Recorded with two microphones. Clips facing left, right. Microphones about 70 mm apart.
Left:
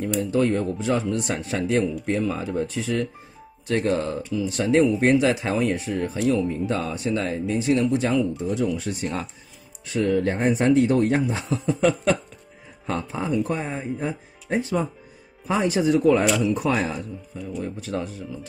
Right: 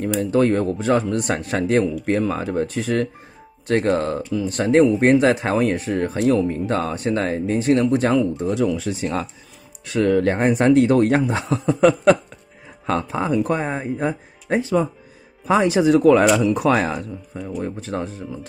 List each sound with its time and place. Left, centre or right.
0.2 s speech: right
8.5 s speech: right
9.8 s speech: right
12.8 s speech: right
13.6 s speech: right
13.9 s speech: right
15.4 s speech: right
16.4 s speech: right
17.3 s speech: right
17.6 s speech: right